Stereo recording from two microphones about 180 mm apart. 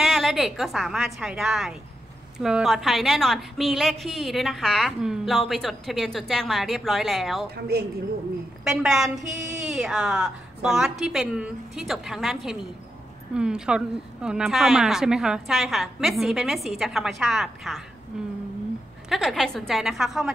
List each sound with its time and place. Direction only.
0.0 s a woman's voice: centre (ahead or behind)
7.7 s a woman's voice: 60° right (ahead or behind)
8.6 s a woman's voice: 5° right (ahead or behind)